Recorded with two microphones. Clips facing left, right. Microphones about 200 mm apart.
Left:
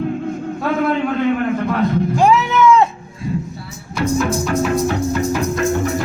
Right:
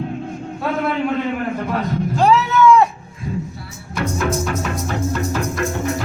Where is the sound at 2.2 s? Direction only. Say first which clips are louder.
Even; 15° left (ahead or behind).